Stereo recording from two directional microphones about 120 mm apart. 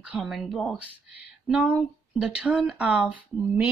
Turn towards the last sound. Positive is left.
turn(degrees=-15)  # may be behind; listen again after turning